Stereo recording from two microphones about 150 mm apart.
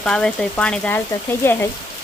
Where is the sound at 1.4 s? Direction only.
15° left (ahead or behind).